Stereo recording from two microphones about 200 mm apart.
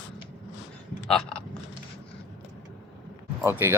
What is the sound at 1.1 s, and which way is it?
Speech, 5° left (ahead or behind).